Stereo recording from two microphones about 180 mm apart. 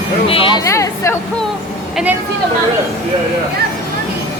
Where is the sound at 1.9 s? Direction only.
10° right (ahead or behind).